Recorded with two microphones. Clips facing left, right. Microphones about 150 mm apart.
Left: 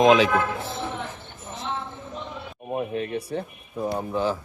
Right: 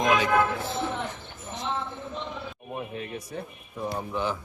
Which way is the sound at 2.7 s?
45° left (ahead or behind).